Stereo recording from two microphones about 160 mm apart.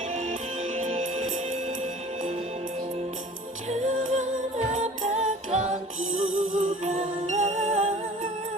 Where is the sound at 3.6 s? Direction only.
50° right (ahead or behind).